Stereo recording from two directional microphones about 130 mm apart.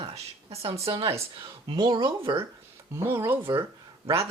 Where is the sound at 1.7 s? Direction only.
35° right (ahead or behind).